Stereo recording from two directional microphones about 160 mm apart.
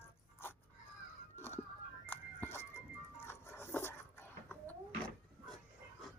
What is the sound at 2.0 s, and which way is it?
Music, 10° left (ahead or behind).